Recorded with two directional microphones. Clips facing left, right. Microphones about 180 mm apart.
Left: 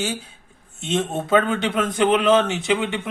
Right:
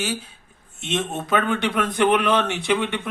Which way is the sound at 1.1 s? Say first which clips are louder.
Left 4 dB; 30° left (ahead or behind).